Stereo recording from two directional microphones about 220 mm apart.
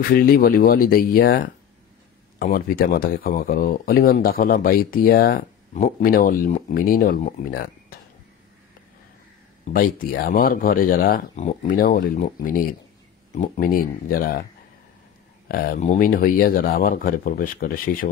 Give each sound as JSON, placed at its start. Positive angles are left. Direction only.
{"t": 0.1, "sound": "speech", "side_deg": 40}
{"t": 9.7, "sound": "speech", "side_deg": 40}
{"t": 15.4, "sound": "speech", "side_deg": 45}